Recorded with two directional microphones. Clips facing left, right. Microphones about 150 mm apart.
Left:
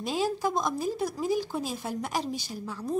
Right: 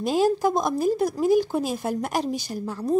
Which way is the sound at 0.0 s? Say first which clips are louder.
Right 7 dB; 50° right (ahead or behind).